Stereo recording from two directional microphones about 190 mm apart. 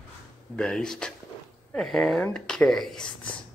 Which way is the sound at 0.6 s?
5° left (ahead or behind).